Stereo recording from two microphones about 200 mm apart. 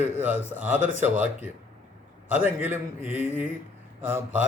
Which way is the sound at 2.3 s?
10° right (ahead or behind).